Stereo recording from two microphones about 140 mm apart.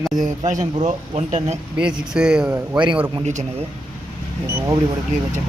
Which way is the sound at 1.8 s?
5° right (ahead or behind).